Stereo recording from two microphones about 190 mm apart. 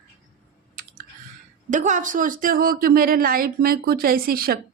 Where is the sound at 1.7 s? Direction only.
40° right (ahead or behind).